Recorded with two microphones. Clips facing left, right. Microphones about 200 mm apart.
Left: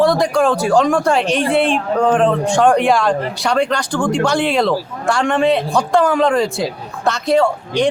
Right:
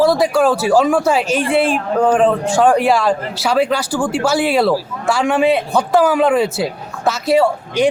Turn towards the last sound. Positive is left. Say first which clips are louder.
# right 1 dB
turn(degrees=-5)  # may be behind; listen again after turning